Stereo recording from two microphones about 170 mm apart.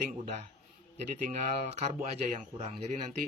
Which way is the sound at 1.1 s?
45° right (ahead or behind).